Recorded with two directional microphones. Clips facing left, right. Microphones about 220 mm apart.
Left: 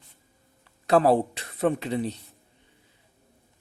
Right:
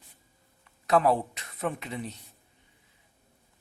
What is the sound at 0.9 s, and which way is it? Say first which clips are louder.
Speech: left 4 dB; 30° left (ahead or behind).